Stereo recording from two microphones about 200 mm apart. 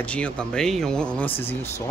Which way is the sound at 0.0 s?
5° left (ahead or behind).